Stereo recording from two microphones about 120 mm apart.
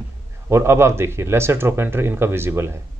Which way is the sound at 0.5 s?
20° right (ahead or behind).